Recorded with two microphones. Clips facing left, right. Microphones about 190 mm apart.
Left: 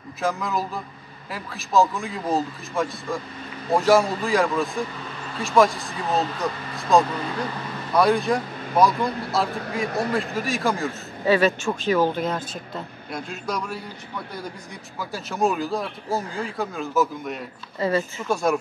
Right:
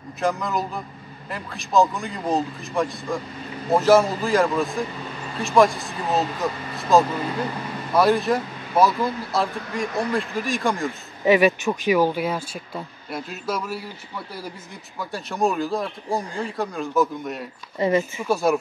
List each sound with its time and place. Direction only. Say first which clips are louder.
0.2 s speech: right 1 dB; centre (ahead or behind)
9.8 s a man's voice: even; 45° left (ahead or behind)
10.3 s speech: even; centre (ahead or behind)
10.9 s speech: right 2 dB; 15° right (ahead or behind)
15.0 s speech: even; centre (ahead or behind)
17.7 s speech: right 3 dB; 20° right (ahead or behind)
18.3 s speech: right 2 dB; 5° right (ahead or behind)